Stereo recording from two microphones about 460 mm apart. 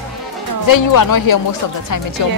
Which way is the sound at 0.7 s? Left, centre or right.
Left.